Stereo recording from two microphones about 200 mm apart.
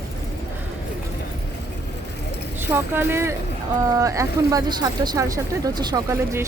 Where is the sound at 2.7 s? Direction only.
10° right (ahead or behind).